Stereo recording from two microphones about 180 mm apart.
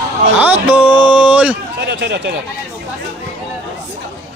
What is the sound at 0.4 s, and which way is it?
Music, 10° right (ahead or behind).